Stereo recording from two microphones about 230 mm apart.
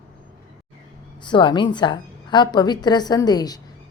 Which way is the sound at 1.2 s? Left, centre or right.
Centre.